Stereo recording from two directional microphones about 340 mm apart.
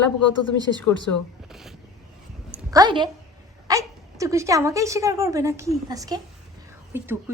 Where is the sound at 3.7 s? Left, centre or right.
Centre.